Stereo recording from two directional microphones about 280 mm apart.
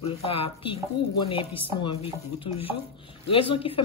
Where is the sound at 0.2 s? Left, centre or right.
Centre.